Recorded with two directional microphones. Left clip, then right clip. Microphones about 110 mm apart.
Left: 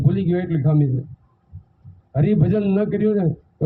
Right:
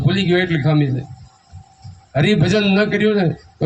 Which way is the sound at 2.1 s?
65° left (ahead or behind).